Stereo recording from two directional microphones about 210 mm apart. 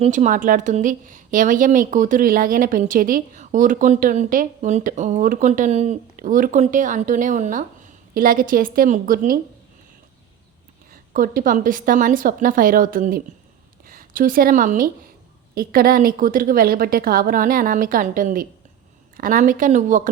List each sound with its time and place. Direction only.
0.0 s a woman's voice: 35° right (ahead or behind)
11.1 s a woman's voice: 40° right (ahead or behind)